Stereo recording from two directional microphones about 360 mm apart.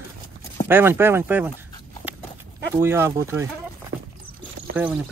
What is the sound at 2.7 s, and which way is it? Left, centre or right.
Speech, centre.